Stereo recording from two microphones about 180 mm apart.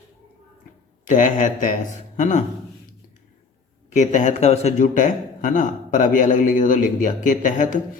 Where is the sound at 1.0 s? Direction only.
45° left (ahead or behind).